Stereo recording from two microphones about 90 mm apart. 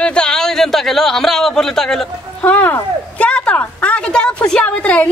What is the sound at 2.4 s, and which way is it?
A woman's voice, 20° left (ahead or behind).